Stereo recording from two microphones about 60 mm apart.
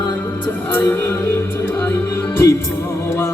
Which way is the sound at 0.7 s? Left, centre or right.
Left.